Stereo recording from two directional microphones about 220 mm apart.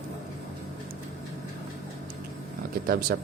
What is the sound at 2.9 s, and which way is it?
Speech, 45° right (ahead or behind).